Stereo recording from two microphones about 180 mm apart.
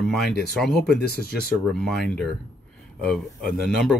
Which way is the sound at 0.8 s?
60° left (ahead or behind).